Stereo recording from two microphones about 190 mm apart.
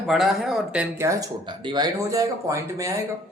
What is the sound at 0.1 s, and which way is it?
Speech, centre (ahead or behind).